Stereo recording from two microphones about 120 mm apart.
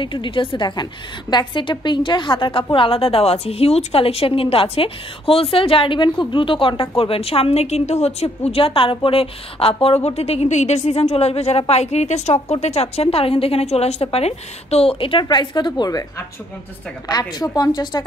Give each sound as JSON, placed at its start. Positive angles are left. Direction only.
{"t": 0.0, "sound": "a woman's voice", "side_deg": 45}